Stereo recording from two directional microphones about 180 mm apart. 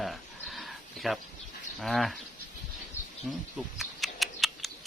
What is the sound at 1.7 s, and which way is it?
Speech, centre (ahead or behind).